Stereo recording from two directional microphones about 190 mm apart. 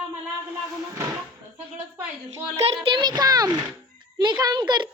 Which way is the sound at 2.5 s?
35° right (ahead or behind).